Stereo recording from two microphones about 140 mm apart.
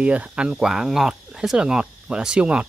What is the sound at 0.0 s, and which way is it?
Speech, 10° right (ahead or behind).